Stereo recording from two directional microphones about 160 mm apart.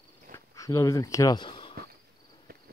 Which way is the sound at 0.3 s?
15° left (ahead or behind).